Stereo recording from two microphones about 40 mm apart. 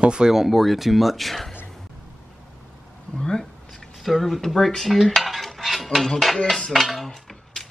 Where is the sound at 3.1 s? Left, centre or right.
Centre.